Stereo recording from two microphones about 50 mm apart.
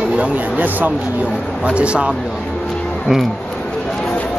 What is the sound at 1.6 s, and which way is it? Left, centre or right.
Speech, right.